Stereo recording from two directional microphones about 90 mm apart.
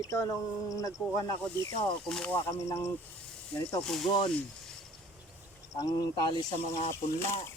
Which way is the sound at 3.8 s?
Centre (ahead or behind).